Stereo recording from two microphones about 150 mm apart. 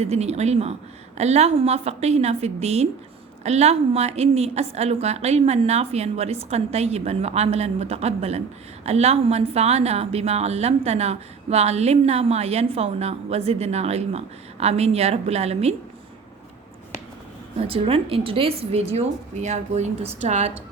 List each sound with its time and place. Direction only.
0.0 s a woman's voice: 45° right (ahead or behind)
17.6 s a woman's voice: 40° right (ahead or behind)